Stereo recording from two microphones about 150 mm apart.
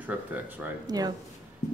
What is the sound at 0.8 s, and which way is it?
Speech, 25° right (ahead or behind).